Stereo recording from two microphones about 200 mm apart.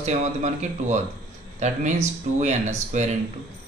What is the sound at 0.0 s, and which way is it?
Speech, 35° right (ahead or behind).